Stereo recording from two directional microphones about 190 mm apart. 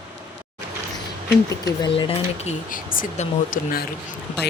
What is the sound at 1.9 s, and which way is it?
Speech, 30° left (ahead or behind).